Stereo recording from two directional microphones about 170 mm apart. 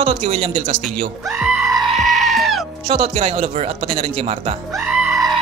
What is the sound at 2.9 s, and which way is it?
Speech, 35° right (ahead or behind).